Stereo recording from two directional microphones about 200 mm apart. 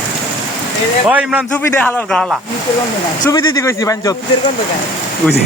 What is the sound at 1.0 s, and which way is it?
Speech, 5° right (ahead or behind).